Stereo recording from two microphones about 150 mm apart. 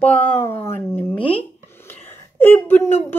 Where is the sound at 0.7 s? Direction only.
15° left (ahead or behind).